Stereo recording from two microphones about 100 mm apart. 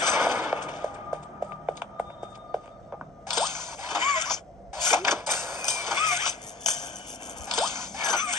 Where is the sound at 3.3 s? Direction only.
45° left (ahead or behind).